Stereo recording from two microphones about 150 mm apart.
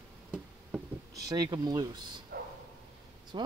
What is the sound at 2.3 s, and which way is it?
Bow-wow, 90° right.